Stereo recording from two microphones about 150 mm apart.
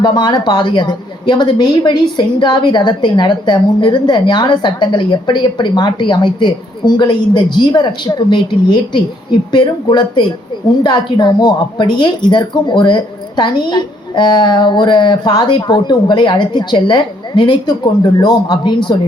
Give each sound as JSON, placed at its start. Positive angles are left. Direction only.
{"t": 0.0, "sound": "a woman's voice", "side_deg": 30}